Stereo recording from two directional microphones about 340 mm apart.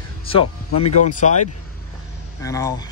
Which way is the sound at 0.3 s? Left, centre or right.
Centre.